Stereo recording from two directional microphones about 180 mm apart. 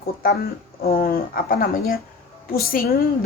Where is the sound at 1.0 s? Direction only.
55° left (ahead or behind).